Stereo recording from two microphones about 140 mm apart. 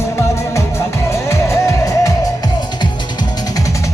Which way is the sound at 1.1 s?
20° left (ahead or behind).